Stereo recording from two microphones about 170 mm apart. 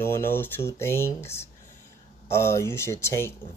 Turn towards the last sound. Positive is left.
turn(degrees=15)  # may be behind; listen again after turning